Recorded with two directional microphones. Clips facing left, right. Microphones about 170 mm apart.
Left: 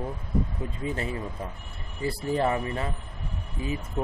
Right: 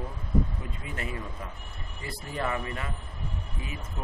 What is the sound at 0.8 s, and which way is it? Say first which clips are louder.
A man's voice: left 6 dB; 30° left (ahead or behind).